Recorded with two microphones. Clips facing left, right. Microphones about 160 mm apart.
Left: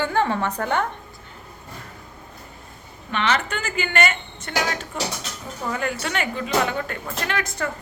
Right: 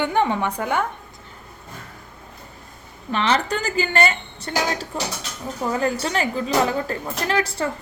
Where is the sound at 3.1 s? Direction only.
35° right (ahead or behind).